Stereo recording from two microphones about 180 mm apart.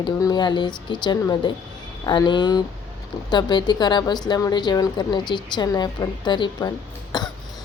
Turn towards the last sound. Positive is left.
turn(degrees=20)  # may be behind; listen again after turning